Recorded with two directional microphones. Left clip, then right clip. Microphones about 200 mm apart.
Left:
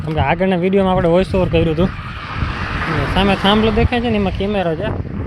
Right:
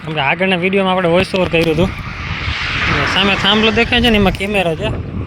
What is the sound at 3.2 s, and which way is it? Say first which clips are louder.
Speech: even; 10° left (ahead or behind).